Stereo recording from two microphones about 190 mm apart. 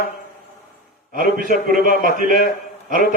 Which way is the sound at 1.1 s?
45° right (ahead or behind).